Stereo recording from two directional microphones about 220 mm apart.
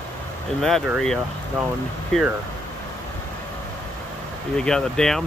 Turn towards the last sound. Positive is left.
turn(degrees=5)  # may be behind; listen again after turning